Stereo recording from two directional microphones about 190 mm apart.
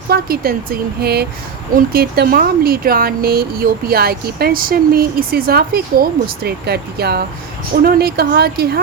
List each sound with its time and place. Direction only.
0.1 s speech: 50° right (ahead or behind)